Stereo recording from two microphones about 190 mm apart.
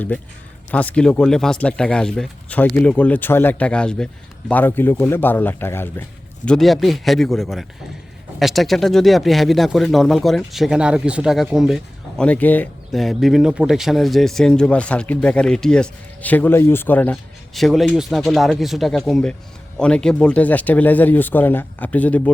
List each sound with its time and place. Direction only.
0.7 s speech: 5° left (ahead or behind)